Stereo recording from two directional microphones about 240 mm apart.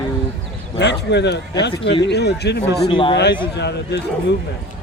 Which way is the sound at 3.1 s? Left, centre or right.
Left.